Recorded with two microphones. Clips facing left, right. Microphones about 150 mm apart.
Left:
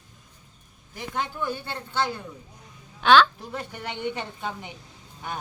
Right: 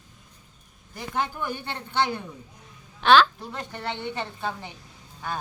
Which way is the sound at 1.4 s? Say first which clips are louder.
Left 1 dB; 15° right (ahead or behind).